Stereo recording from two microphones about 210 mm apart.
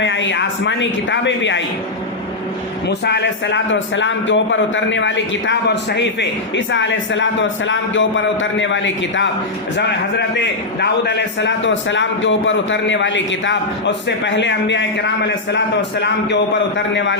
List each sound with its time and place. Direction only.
0.0 s a man's voice: 60° left (ahead or behind)
2.8 s a man's voice: 55° left (ahead or behind)